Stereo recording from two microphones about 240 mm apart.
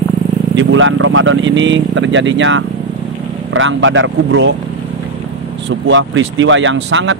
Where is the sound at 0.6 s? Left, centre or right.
Right.